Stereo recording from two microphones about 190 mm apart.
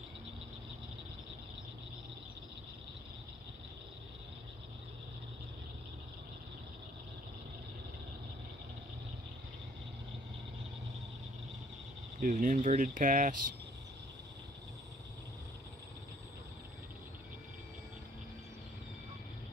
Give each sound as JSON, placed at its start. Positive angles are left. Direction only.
{"t": 12.2, "sound": "speech", "side_deg": -45}